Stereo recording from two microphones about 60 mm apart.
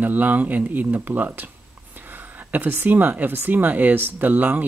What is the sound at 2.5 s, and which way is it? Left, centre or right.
Speech, right.